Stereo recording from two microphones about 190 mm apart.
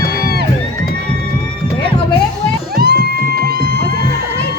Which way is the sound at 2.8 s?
55° right (ahead or behind).